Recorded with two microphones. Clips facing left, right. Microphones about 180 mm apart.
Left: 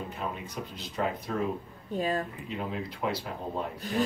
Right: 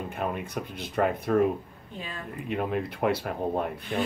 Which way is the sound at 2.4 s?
60° right (ahead or behind).